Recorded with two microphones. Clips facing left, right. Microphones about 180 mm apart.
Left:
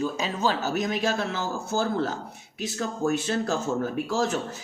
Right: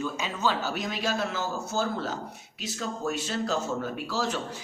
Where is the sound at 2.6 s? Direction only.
50° left (ahead or behind).